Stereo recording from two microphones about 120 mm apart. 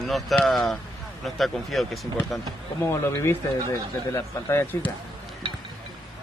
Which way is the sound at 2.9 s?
25° left (ahead or behind).